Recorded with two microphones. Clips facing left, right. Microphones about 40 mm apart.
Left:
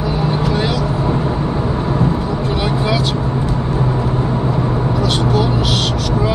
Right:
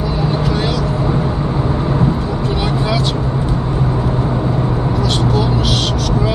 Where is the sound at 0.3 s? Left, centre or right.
Centre.